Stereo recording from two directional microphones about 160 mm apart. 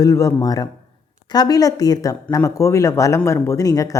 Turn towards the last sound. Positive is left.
turn(degrees=20)  # may be behind; listen again after turning